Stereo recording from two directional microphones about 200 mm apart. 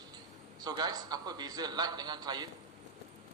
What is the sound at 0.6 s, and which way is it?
A man's voice, 20° right (ahead or behind).